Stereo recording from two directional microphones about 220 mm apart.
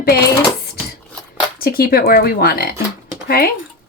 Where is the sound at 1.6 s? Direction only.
45° left (ahead or behind).